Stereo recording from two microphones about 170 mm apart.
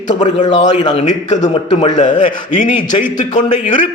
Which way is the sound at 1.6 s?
30° left (ahead or behind).